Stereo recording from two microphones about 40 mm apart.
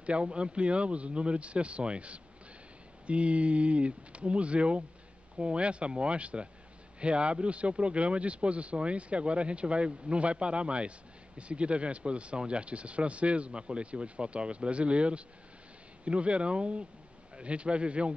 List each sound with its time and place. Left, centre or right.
0.0 s speech: right